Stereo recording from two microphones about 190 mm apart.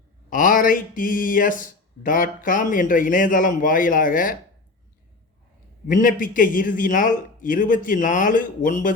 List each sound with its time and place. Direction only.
0.3 s a man's voice: 45° left (ahead or behind)
5.9 s a man's voice: 45° left (ahead or behind)